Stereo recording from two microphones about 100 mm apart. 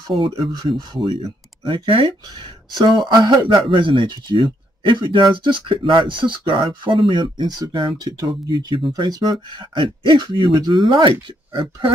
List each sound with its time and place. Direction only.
0.1 s speech: 55° right (ahead or behind)
2.8 s speech: 45° right (ahead or behind)